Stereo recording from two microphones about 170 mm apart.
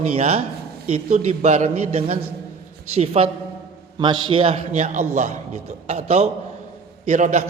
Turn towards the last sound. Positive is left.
turn(degrees=-45)  # may be behind; listen again after turning